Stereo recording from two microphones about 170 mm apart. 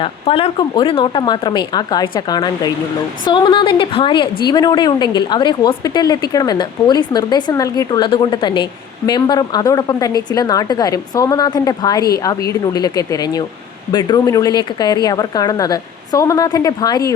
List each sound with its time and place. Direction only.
0.0 s a woman's voice: 35° left (ahead or behind)